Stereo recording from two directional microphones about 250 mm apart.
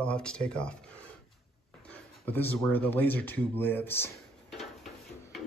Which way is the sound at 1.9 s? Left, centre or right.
Centre.